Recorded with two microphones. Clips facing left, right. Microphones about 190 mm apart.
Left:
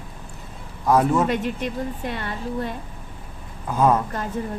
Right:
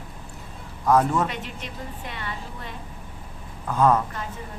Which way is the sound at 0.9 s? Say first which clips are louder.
Left 2 dB; 10° left (ahead or behind).